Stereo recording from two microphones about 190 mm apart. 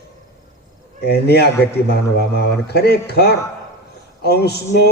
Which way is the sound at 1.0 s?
60° left (ahead or behind).